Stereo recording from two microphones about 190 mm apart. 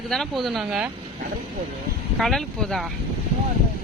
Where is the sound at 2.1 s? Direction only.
Centre (ahead or behind).